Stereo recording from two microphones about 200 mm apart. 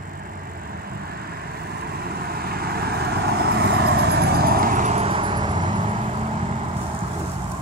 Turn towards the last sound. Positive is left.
turn(degrees=-35)  # may be behind; listen again after turning